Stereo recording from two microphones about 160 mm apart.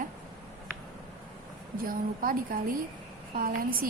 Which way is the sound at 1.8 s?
60° right (ahead or behind).